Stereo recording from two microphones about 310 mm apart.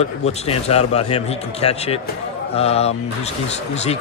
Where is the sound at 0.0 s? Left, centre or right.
Centre.